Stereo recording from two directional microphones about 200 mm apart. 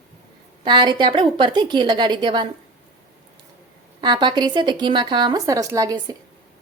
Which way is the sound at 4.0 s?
20° right (ahead or behind).